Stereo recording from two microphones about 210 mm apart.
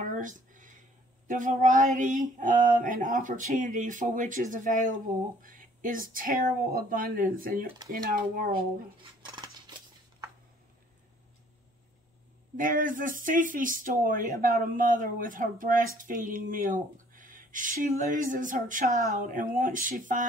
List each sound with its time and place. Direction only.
0.0 s a sound: 40° right (ahead or behind)
1.2 s speech: 40° right (ahead or behind)
9.3 s scissors: 20° right (ahead or behind)
12.5 s speech: 40° right (ahead or behind)